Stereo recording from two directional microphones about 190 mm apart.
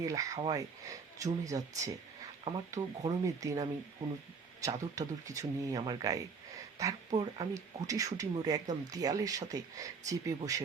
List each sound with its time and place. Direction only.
0.0 s speech: 15° right (ahead or behind)